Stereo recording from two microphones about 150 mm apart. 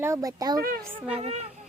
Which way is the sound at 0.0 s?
20° right (ahead or behind).